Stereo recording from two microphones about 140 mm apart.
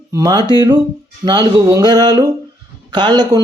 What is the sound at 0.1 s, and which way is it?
Speech, 30° right (ahead or behind).